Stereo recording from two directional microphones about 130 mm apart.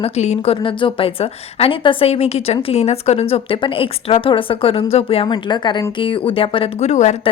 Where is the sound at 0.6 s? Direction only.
40° left (ahead or behind).